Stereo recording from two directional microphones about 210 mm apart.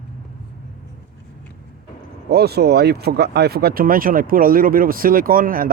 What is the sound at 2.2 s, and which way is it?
Speech, 50° right (ahead or behind).